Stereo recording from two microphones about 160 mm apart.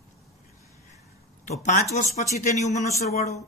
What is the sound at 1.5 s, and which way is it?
A man's voice, 50° left (ahead or behind).